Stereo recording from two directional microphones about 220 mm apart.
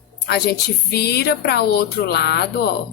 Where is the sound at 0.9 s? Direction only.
45° left (ahead or behind).